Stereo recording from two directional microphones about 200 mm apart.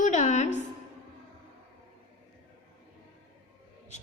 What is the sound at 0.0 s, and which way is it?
Music, 35° left (ahead or behind).